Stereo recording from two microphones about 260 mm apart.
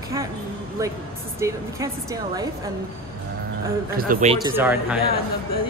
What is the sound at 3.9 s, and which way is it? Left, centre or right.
Speech, right.